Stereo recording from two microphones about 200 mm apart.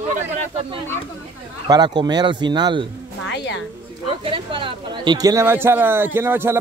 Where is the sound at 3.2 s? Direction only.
60° left (ahead or behind).